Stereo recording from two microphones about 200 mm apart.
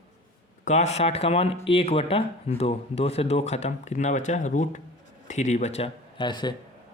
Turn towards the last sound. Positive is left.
turn(degrees=20)  # may be behind; listen again after turning